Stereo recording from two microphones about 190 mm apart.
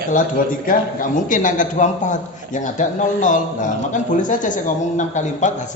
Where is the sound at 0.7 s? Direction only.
45° left (ahead or behind).